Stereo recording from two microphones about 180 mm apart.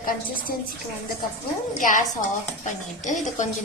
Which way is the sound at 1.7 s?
45° left (ahead or behind).